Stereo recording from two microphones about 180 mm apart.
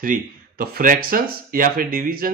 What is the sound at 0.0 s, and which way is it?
Speech, 50° right (ahead or behind).